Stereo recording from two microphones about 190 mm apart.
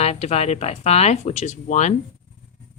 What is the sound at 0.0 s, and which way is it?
Speech, 35° left (ahead or behind).